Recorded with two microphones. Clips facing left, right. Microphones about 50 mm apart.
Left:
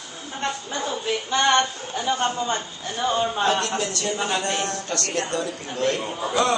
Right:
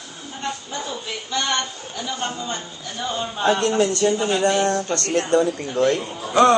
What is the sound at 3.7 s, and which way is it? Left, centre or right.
Speech, right.